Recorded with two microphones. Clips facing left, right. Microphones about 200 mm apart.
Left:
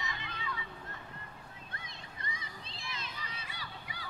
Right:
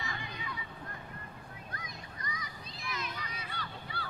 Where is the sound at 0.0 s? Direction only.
20° left (ahead or behind).